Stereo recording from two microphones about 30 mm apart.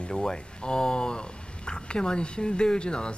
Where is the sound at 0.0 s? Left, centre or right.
Left.